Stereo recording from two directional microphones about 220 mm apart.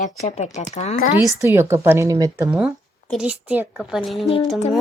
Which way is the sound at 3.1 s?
5° right (ahead or behind).